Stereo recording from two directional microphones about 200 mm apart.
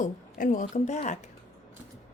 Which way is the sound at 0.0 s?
40° left (ahead or behind).